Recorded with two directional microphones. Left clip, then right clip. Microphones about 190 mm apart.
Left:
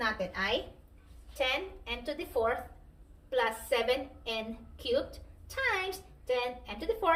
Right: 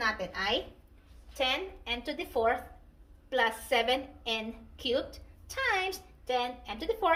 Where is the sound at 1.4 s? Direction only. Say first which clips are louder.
Right 1 dB; 50° right (ahead or behind).